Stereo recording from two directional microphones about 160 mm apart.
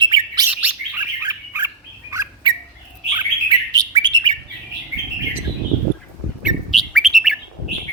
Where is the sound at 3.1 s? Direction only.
25° right (ahead or behind).